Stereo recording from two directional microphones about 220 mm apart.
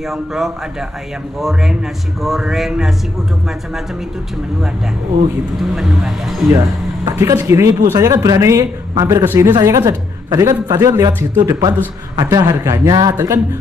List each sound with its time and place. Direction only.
0.1 s speech: centre (ahead or behind)
5.6 s speech: centre (ahead or behind)
7.1 s speech: 15° right (ahead or behind)